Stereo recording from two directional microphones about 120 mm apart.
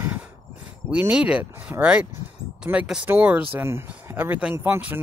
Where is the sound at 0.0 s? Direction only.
15° right (ahead or behind).